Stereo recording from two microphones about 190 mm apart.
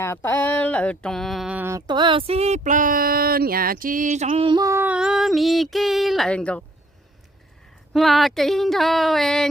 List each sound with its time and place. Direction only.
0.0 s a sound: 15° left (ahead or behind); by 1.8 s 10° right (ahead or behind)
1.9 s speech: 25° right (ahead or behind); by 6.7 s 5° left (ahead or behind)
7.9 s speech: centre (ahead or behind)